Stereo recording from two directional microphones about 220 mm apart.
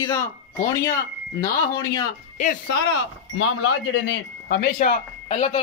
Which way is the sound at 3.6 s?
70° left (ahead or behind).